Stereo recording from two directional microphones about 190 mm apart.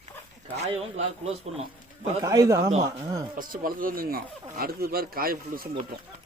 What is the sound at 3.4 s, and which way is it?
Speech, 50° right (ahead or behind).